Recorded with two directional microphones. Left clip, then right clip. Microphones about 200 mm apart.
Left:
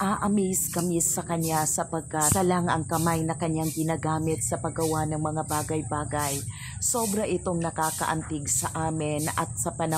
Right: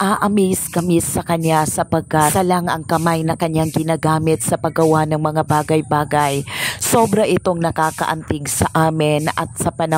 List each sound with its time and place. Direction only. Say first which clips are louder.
0.0 s a woman's voice: right 10 dB; 45° right (ahead or behind)